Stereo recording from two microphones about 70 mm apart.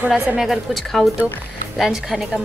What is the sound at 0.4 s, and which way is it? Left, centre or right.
Speech, centre.